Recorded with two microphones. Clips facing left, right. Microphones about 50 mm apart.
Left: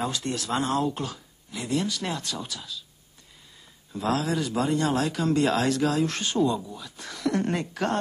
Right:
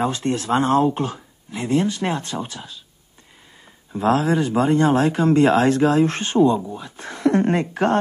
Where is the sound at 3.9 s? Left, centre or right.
Right.